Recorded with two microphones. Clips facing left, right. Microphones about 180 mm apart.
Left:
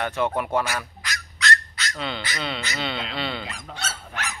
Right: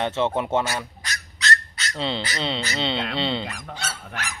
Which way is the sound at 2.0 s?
25° right (ahead or behind).